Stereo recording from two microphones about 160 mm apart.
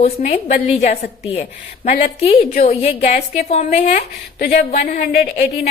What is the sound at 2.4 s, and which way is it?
Speech, 65° left (ahead or behind).